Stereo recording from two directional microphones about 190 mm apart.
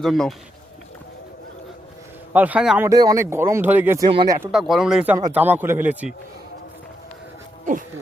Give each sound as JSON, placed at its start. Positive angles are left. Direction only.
{"t": 0.0, "sound": "speech", "side_deg": 0}
{"t": 2.3, "sound": "speech", "side_deg": -10}
{"t": 4.1, "sound": "speech", "side_deg": -25}
{"t": 4.5, "sound": "speech", "side_deg": 0}